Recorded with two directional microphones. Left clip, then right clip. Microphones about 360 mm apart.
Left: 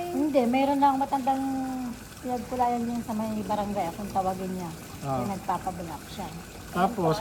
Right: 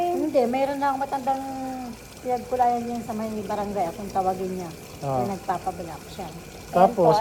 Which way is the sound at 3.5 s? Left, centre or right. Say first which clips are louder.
Right 2 dB; centre.